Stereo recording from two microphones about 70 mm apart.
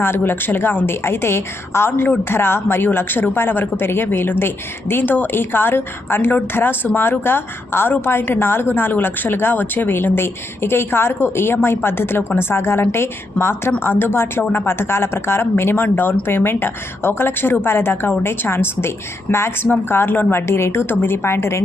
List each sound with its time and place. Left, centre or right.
0.0 s a woman's voice: left